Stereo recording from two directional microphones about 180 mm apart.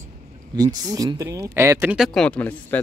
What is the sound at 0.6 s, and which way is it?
Speech, 20° right (ahead or behind).